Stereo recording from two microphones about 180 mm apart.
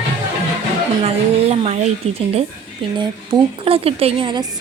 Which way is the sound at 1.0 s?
35° right (ahead or behind).